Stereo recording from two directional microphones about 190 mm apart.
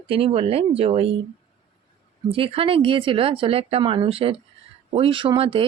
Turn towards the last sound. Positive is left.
turn(degrees=-30)  # may be behind; listen again after turning